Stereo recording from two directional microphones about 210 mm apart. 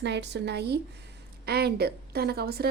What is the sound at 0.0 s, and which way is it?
Speech, 55° right (ahead or behind).